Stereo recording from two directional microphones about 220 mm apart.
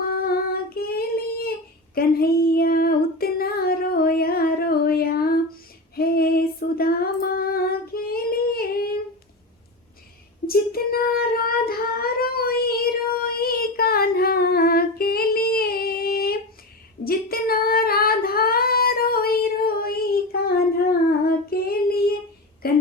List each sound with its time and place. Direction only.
0.1 s singing: 45° left (ahead or behind)
2.0 s female singing: 45° left (ahead or behind)
10.4 s child singing: 40° left (ahead or behind)
17.0 s female singing: 40° left (ahead or behind)
21.1 s child singing: 45° left (ahead or behind)
22.6 s a sound: 45° left (ahead or behind)